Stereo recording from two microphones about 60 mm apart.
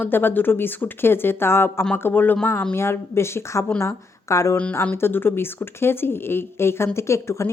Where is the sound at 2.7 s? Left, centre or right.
Left.